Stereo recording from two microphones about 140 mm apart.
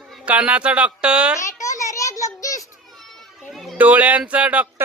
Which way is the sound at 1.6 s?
20° left (ahead or behind).